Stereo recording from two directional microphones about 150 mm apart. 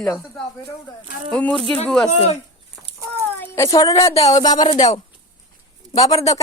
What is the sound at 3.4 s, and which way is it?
A woman's voice, 20° left (ahead or behind).